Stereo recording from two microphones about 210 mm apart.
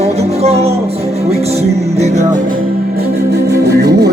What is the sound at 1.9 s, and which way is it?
Music, 35° right (ahead or behind).